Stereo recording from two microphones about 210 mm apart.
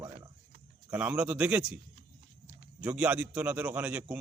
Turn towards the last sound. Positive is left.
turn(degrees=-5)  # may be behind; listen again after turning